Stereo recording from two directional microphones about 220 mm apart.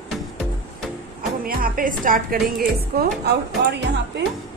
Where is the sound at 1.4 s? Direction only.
40° right (ahead or behind).